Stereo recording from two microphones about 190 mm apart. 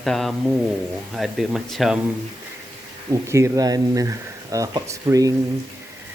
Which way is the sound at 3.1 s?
15° right (ahead or behind).